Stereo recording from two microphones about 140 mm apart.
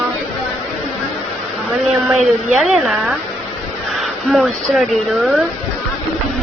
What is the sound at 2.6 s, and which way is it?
A woman's voice, centre (ahead or behind).